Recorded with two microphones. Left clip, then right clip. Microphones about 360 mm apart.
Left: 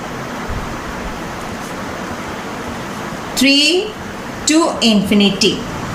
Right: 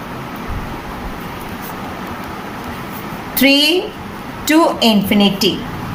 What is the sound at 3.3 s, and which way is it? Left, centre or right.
A woman's voice, centre.